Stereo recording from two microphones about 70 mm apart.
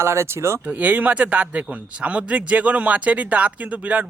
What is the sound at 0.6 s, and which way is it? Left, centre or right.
Speech, right.